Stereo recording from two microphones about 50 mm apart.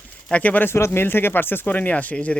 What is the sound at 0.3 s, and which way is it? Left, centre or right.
Speech, left.